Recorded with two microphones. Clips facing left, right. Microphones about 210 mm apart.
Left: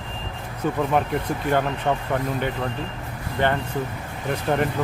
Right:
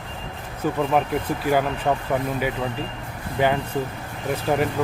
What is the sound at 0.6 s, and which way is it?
Speech, 5° right (ahead or behind).